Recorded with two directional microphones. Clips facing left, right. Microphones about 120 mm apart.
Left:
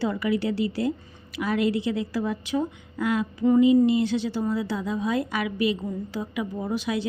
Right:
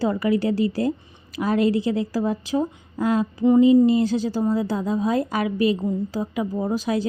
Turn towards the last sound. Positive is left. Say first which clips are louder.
# right 4 dB
turn(degrees=-40)  # may be behind; listen again after turning